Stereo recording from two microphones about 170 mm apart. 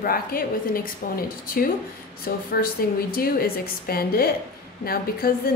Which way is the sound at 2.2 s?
60° left (ahead or behind).